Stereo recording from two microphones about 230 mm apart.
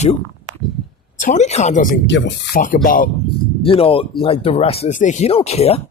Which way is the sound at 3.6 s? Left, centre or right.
Left.